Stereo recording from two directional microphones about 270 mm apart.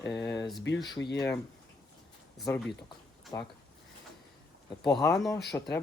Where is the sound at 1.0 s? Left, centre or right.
Left.